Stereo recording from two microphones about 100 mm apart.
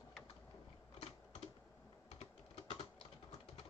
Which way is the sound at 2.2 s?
90° left.